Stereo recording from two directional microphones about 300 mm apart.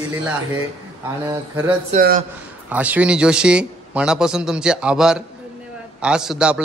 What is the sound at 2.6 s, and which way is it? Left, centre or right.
A man's voice, centre.